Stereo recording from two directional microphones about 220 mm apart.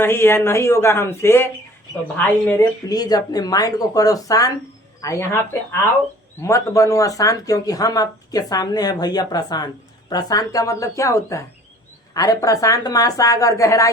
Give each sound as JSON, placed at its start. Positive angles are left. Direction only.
{"t": 0.0, "sound": "a woman's voice", "side_deg": 10}
{"t": 6.4, "sound": "a woman's voice", "side_deg": 15}